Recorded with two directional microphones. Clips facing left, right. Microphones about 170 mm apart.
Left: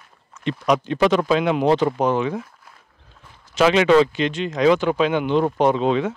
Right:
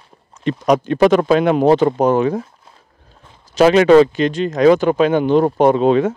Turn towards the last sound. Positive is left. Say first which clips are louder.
# right 6 dB
turn(degrees=-45)  # may be behind; listen again after turning